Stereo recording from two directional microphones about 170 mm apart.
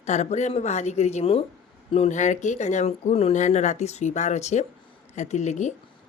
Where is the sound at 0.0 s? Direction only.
40° left (ahead or behind).